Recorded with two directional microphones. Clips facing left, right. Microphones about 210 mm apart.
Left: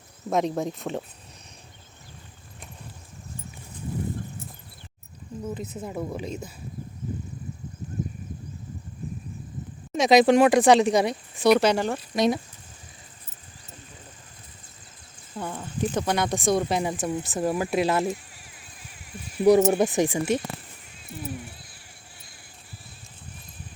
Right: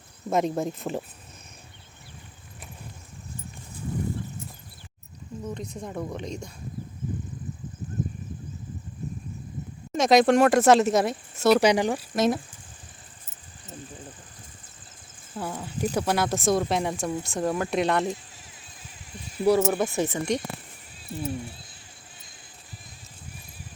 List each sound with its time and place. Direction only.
0.3 s speech: centre (ahead or behind)
5.5 s speech: 5° left (ahead or behind)
9.9 s speech: centre (ahead or behind)
11.6 s speech: 15° right (ahead or behind)
12.1 s speech: centre (ahead or behind)
15.4 s speech: 5° right (ahead or behind)
19.1 s speech: 15° left (ahead or behind)